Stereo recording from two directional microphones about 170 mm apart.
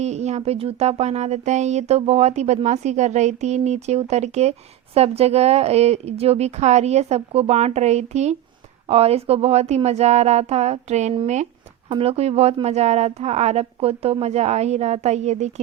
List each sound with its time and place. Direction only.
0.0 s speech: 40° right (ahead or behind)